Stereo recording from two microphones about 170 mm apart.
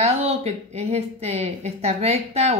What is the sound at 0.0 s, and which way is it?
Speech, 35° right (ahead or behind).